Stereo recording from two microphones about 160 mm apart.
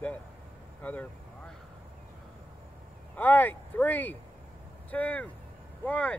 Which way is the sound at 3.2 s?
10° left (ahead or behind).